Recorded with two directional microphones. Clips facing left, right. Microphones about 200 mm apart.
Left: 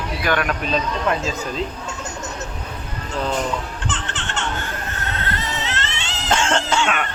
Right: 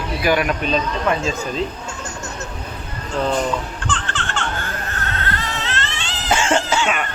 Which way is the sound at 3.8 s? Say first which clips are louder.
Right 2 dB; 20° left (ahead or behind).